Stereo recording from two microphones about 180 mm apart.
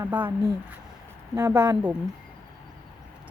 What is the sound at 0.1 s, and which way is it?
Speech, 10° right (ahead or behind).